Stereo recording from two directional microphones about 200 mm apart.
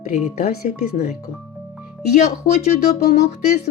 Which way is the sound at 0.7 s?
35° left (ahead or behind).